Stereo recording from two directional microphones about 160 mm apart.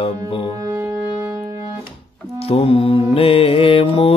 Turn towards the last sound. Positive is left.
turn(degrees=35)  # may be behind; listen again after turning